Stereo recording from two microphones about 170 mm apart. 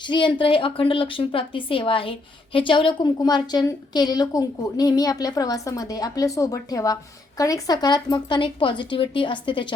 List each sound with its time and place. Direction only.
0.0 s a woman's voice: 30° left (ahead or behind)